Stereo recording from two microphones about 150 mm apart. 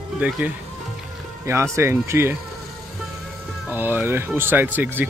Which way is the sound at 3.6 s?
15° right (ahead or behind).